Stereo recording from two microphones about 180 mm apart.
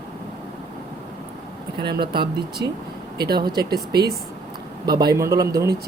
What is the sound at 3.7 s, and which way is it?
Speech, 60° right (ahead or behind).